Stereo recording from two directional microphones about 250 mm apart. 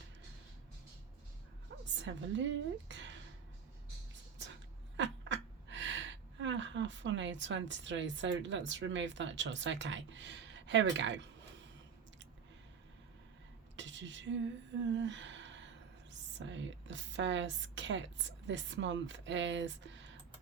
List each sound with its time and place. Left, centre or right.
2.0 s a woman's voice: right
4.9 s speech: right
13.7 s a sound: right
16.4 s a woman's voice: right